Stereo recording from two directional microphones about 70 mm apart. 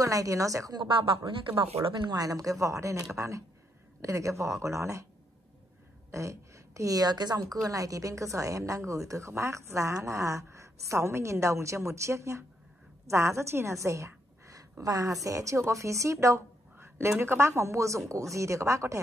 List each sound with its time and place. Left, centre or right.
0.0 s a woman's voice: right
2.0 s a woman's voice: right
6.1 s a woman's voice: right
16.7 s a sound: right
17.2 s a woman's voice: right